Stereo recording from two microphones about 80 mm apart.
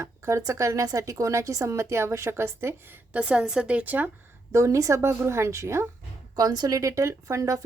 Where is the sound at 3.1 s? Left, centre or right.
Centre.